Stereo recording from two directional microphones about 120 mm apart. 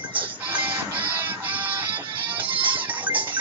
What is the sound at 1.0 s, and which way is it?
Music, 15° right (ahead or behind).